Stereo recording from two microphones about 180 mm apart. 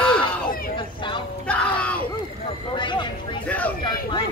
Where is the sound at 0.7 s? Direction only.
25° left (ahead or behind).